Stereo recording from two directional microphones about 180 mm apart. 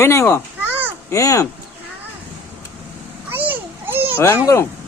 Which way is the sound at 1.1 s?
20° left (ahead or behind).